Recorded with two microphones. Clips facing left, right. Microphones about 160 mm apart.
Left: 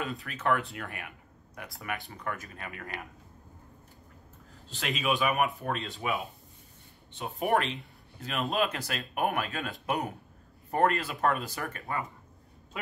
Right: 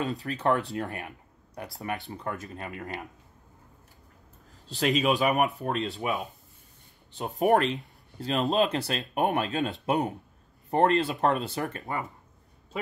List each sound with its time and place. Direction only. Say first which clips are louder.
0.0 s speech: right 5 dB; 35° right (ahead or behind)
4.6 s speech: right 6 dB; 35° right (ahead or behind)
7.1 s speech: right 5 dB; 35° right (ahead or behind)